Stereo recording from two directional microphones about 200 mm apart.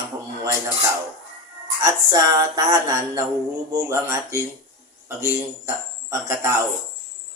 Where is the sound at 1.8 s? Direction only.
20° right (ahead or behind).